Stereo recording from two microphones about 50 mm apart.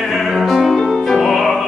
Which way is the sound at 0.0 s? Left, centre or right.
Centre.